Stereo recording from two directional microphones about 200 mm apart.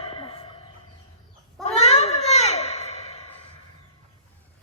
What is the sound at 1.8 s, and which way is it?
Baby cry, 35° left (ahead or behind).